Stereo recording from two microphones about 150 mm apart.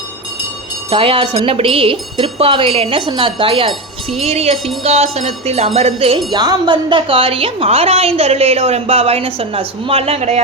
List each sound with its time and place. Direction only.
0.9 s speech: 40° right (ahead or behind)
4.2 s music: 45° right (ahead or behind)
6.1 s speech: 25° right (ahead or behind); by 10.4 s 45° right (ahead or behind)